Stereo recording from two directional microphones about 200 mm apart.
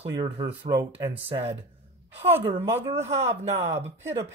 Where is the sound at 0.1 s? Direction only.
20° right (ahead or behind).